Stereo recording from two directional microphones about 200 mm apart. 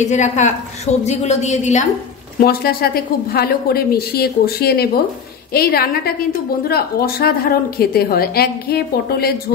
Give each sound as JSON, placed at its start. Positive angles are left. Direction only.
{"t": 0.0, "sound": "a woman's voice", "side_deg": 35}
{"t": 2.4, "sound": "a woman's voice", "side_deg": 50}